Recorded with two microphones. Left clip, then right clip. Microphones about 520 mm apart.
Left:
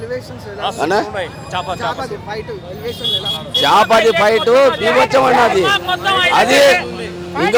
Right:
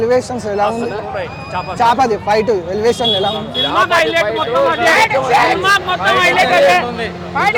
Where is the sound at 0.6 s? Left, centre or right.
Left.